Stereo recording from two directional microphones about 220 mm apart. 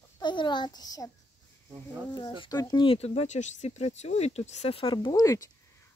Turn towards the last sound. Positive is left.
turn(degrees=15)  # may be behind; listen again after turning